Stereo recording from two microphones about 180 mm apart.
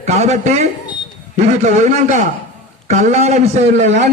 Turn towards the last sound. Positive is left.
turn(degrees=-40)  # may be behind; listen again after turning